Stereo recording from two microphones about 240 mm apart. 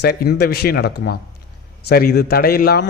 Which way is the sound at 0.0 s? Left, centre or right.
Left.